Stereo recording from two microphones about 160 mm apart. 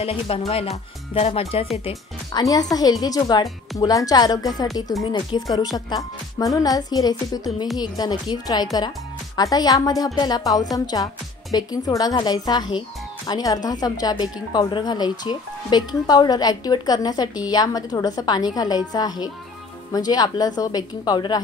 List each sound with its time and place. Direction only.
0.0 s speech: 35° left (ahead or behind)
2.3 s speech: 25° left (ahead or behind)